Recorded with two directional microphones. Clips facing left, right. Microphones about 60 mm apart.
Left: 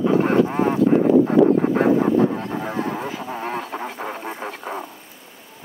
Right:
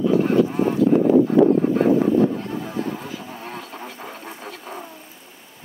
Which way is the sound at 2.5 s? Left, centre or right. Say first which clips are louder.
Left 2 dB; left.